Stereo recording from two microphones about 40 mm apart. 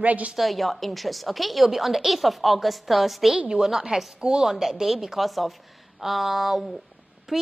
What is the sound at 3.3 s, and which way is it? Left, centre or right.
Speech, centre.